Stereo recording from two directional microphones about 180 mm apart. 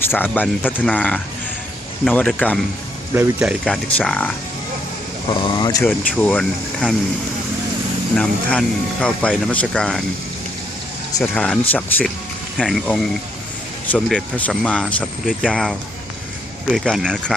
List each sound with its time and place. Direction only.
0.0 s speech: 10° left (ahead or behind)
3.2 s speech: 10° right (ahead or behind)
3.8 s speech: 5° left (ahead or behind)
5.3 s speech: 25° left (ahead or behind)
6.1 s speech: 5° left (ahead or behind)
8.1 s speech: 5° left (ahead or behind)
11.2 s speech: 5° left (ahead or behind)
16.7 s speech: centre (ahead or behind)